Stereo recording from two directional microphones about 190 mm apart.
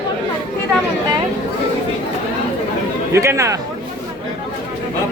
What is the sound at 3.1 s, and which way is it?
Speech, 15° right (ahead or behind).